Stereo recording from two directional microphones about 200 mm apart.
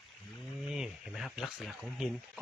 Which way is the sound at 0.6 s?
5° right (ahead or behind).